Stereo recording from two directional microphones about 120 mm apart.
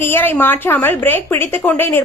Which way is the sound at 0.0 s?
20° left (ahead or behind).